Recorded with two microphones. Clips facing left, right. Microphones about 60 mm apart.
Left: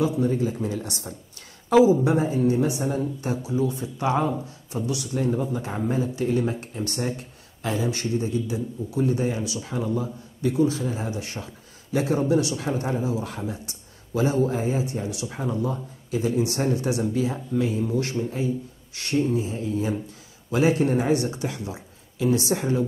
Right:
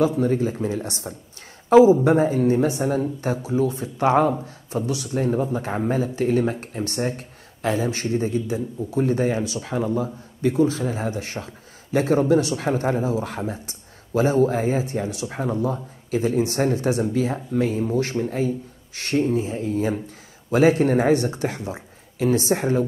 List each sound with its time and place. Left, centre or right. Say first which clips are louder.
0.0 s speech: right 3 dB; right
2.0 s speech: right 4 dB; right
10.4 s speech: right 2 dB; right